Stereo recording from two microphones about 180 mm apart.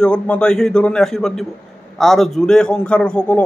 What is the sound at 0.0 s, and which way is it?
A man's voice, 5° left (ahead or behind).